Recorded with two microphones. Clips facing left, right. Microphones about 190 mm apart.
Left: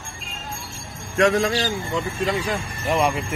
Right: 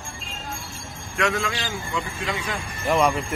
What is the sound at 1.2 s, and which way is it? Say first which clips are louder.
A man's voice: left 7 dB; 35° left (ahead or behind).